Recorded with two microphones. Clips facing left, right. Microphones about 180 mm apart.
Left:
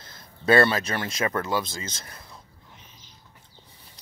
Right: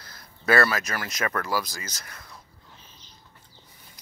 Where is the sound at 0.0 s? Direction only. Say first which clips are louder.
Left 3 dB; 25° left (ahead or behind).